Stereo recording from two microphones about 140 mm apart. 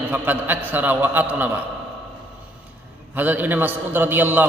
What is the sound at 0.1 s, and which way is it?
A man's voice, 15° right (ahead or behind).